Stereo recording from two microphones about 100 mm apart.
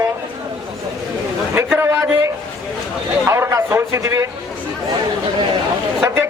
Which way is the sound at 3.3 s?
25° right (ahead or behind).